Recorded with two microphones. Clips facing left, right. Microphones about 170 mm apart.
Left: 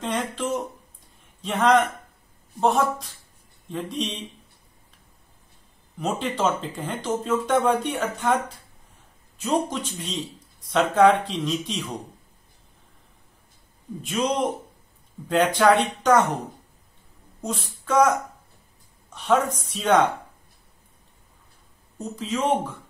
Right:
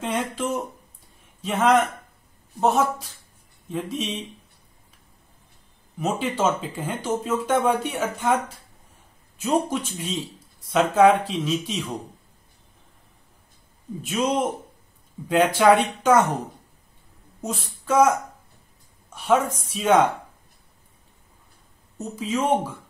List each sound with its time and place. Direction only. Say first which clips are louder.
0.0 s speech: right 1 dB; 10° right (ahead or behind)
5.9 s speech: right 1 dB; 5° right (ahead or behind)
14.0 s speech: right 1 dB; 5° right (ahead or behind)
17.4 s a sound: even; 5° right (ahead or behind)
19.0 s speech: right 1 dB; 10° right (ahead or behind)
21.9 s speech: right 2 dB; 10° right (ahead or behind)